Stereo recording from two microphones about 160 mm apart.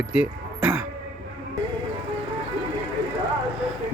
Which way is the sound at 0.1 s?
5° right (ahead or behind).